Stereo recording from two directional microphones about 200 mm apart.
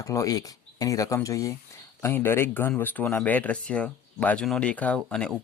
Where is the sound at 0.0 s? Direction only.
15° left (ahead or behind).